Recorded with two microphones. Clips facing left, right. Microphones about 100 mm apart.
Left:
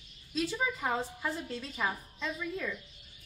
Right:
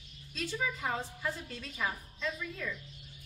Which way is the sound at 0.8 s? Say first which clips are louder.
Left 2 dB; 10° left (ahead or behind).